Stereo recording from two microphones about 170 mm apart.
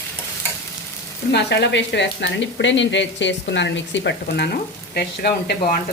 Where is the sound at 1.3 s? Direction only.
85° left.